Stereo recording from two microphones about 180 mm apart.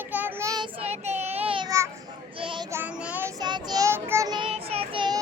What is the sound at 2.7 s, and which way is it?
Child singing, 10° right (ahead or behind).